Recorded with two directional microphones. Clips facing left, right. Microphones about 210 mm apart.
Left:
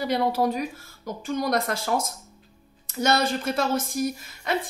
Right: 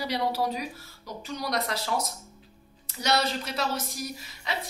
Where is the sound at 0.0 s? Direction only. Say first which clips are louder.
Left 5 dB; 50° left (ahead or behind).